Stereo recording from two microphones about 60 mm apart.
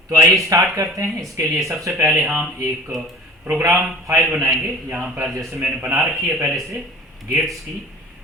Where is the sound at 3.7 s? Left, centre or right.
Right.